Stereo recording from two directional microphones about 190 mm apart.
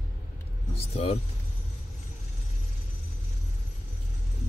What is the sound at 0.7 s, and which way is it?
Speech, 30° left (ahead or behind).